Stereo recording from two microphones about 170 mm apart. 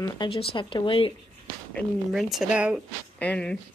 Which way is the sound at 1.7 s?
Centre (ahead or behind).